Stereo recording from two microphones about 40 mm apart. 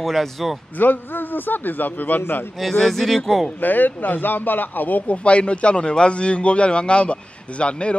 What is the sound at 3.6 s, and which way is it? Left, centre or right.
A man's voice, left.